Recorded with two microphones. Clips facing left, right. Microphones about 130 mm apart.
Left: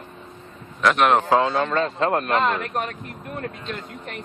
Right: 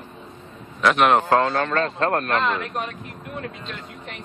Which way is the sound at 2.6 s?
45° left (ahead or behind).